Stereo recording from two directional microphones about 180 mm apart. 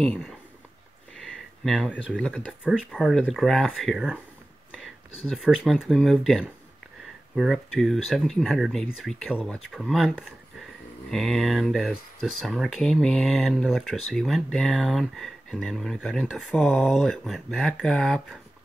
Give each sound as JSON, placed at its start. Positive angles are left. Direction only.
{"t": 0.0, "sound": "speech", "side_deg": 5}
{"t": 1.2, "sound": "a sound", "side_deg": 0}
{"t": 2.1, "sound": "speech", "side_deg": 5}
{"t": 5.2, "sound": "speech", "side_deg": 0}